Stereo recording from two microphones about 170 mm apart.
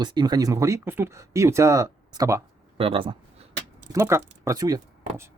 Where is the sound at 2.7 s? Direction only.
35° right (ahead or behind).